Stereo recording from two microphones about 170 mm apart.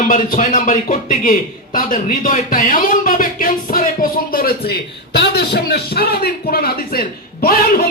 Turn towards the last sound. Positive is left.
turn(degrees=60)  # may be behind; listen again after turning